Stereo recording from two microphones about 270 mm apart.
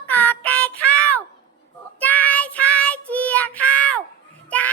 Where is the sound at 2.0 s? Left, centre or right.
Centre.